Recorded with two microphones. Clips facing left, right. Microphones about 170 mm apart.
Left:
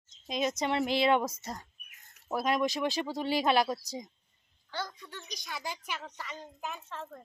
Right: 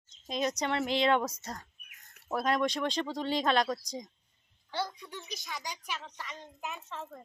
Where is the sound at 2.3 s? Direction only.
5° left (ahead or behind).